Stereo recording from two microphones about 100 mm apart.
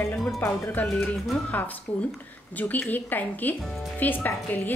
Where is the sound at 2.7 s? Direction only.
20° left (ahead or behind).